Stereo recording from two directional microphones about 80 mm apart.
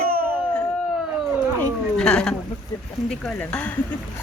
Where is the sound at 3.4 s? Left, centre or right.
Centre.